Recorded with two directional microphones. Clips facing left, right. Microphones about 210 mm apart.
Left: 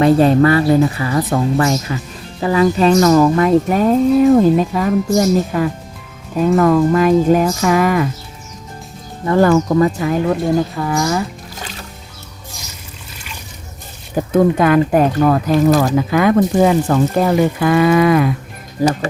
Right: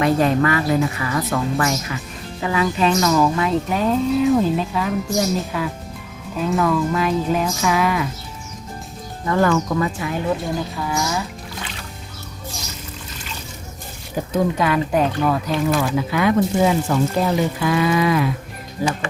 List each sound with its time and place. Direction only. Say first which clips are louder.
0.0 s speech: left 6 dB; 30° left (ahead or behind); by 8.0 s 45° left (ahead or behind)
9.2 s speech: left 6 dB; 35° left (ahead or behind)
10.8 s speech: left 6 dB; 50° left (ahead or behind)
14.3 s speech: left 7 dB; 50° left (ahead or behind)